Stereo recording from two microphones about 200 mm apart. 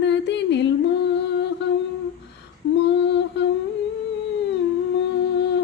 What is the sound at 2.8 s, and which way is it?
Female singing, 60° left (ahead or behind).